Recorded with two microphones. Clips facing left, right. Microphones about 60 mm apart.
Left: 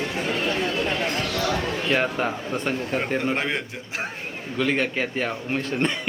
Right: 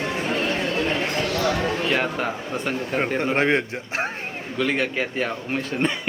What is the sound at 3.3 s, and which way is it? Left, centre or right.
Speech, right.